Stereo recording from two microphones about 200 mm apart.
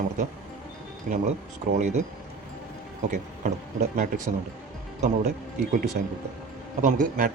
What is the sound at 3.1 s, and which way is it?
Speech, 40° right (ahead or behind).